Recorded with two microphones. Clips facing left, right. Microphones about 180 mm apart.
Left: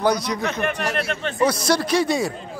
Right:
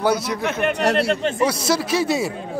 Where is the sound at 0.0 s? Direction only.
5° right (ahead or behind).